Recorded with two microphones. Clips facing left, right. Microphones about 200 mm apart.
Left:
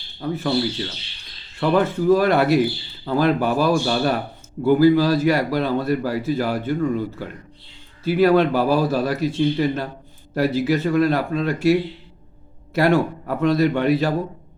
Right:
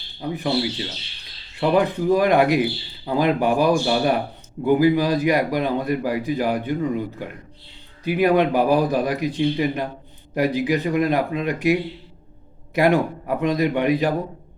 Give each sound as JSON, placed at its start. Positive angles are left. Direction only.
{"t": 0.2, "sound": "a man's voice", "side_deg": -15}
{"t": 1.5, "sound": "a man's voice", "side_deg": -15}